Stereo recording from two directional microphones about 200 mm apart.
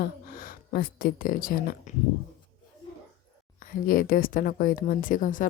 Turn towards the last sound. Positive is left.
turn(degrees=40)  # may be behind; listen again after turning